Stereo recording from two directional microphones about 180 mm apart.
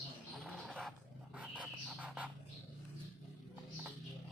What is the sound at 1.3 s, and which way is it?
Bird, 5° right (ahead or behind).